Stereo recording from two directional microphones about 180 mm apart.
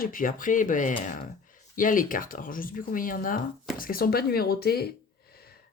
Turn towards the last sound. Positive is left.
turn(degrees=60)  # may be behind; listen again after turning